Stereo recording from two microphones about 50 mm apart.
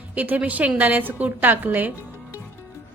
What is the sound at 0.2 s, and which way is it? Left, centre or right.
A woman's voice, right.